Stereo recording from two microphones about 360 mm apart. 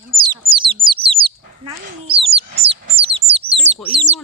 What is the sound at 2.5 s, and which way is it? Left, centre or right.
Bird, right.